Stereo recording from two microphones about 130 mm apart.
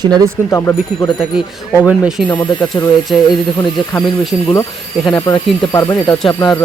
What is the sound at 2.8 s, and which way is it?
Speech, 30° left (ahead or behind).